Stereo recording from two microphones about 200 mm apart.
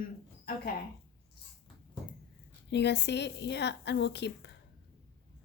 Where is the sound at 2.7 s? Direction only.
60° left (ahead or behind).